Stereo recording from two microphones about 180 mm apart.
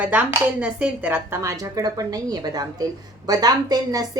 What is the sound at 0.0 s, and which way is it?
A woman's voice, 10° right (ahead or behind).